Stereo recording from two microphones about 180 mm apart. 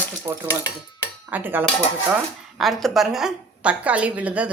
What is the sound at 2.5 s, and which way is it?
A woman's voice, centre (ahead or behind).